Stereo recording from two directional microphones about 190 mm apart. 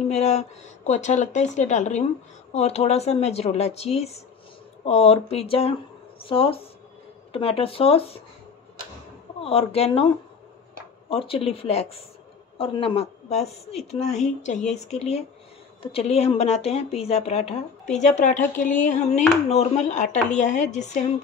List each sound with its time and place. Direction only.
0.1 s speech: 35° left (ahead or behind)
9.4 s speech: 30° left (ahead or behind)
11.1 s speech: 30° left (ahead or behind)